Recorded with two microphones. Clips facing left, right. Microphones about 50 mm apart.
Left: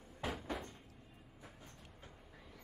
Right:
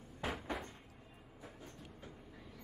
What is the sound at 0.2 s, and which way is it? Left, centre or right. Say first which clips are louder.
Cupboard open or close: right 1 dB; centre.